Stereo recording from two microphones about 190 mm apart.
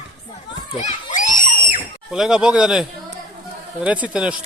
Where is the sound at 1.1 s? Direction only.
40° left (ahead or behind).